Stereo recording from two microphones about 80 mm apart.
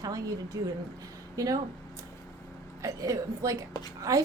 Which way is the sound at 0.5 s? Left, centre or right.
Right.